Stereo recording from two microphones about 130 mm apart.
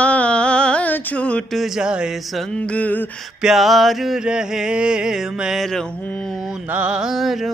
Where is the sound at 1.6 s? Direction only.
5° right (ahead or behind); by 3.1 s 10° left (ahead or behind).